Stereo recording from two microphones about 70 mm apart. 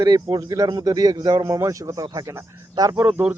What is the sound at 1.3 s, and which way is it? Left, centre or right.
Speech, right.